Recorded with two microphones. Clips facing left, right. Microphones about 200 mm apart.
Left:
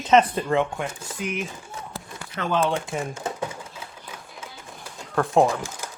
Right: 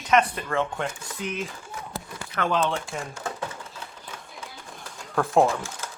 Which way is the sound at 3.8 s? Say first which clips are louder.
Left 1 dB; 5° left (ahead or behind).